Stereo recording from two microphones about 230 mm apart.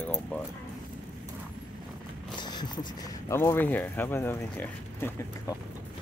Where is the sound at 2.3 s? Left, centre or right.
Centre.